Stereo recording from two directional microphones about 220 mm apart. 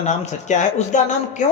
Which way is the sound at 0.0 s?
30° left (ahead or behind).